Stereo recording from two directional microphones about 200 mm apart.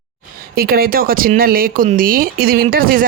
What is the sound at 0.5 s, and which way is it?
Speech, 50° right (ahead or behind).